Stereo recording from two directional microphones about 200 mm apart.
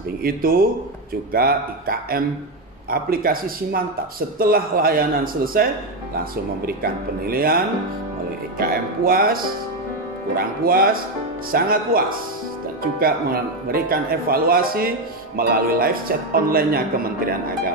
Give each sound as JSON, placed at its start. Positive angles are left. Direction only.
{"t": 0.2, "sound": "speech", "side_deg": -45}
{"t": 13.0, "sound": "speech", "side_deg": -45}